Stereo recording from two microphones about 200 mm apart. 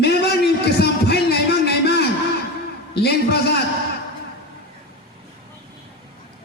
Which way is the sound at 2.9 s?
55° left (ahead or behind).